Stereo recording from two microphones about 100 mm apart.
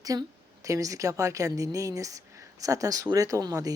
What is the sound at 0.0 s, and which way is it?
A woman's voice, 35° right (ahead or behind).